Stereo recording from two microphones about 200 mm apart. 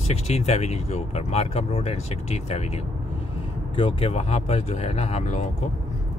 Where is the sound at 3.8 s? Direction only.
30° left (ahead or behind).